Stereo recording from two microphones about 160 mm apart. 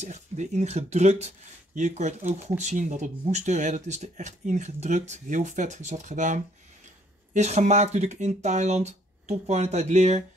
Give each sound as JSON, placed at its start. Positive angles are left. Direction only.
{"t": 0.0, "sound": "speech", "side_deg": -45}